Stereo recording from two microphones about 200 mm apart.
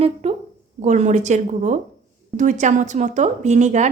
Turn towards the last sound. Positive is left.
turn(degrees=-35)  # may be behind; listen again after turning